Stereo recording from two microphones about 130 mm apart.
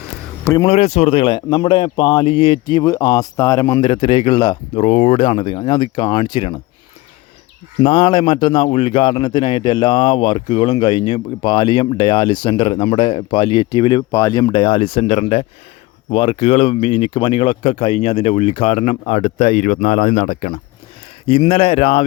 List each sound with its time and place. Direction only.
0.7 s speech: 55° left (ahead or behind); by 3.8 s 25° left (ahead or behind)
3.8 s speech: 40° left (ahead or behind)
4.8 s speech: 60° left (ahead or behind)
5.2 s speech: 40° left (ahead or behind)
7.8 s speech: 40° left (ahead or behind); by 20.6 s 70° left (ahead or behind)
21.2 s speech: 45° left (ahead or behind)